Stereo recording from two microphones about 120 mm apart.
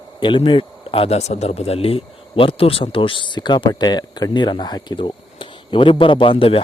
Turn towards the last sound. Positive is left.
turn(degrees=50)  # may be behind; listen again after turning